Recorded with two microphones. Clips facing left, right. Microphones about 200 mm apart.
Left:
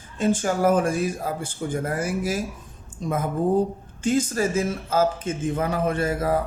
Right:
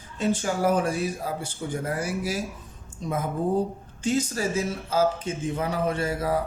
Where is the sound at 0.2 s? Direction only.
50° left (ahead or behind).